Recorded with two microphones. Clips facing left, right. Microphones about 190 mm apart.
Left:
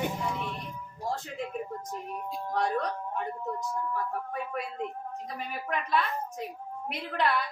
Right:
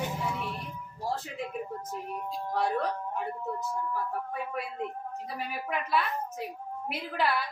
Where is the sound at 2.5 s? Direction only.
5° right (ahead or behind).